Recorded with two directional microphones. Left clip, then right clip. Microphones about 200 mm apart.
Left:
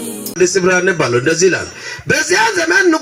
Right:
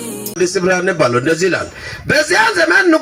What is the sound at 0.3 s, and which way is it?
Speech, 40° right (ahead or behind).